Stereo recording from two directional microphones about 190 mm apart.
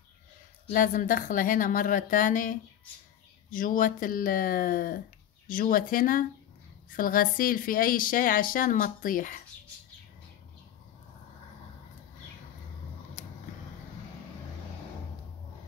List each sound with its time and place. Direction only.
0.7 s speech: 45° left (ahead or behind)